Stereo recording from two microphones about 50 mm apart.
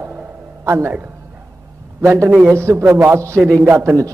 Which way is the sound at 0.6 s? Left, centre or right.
Right.